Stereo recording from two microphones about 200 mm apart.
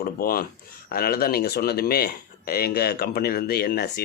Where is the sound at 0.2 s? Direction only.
50° left (ahead or behind).